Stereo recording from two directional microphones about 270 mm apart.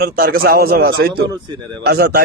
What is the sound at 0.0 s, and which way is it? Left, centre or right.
A man's voice, right.